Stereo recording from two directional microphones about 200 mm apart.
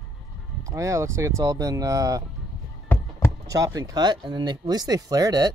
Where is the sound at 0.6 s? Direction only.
15° right (ahead or behind).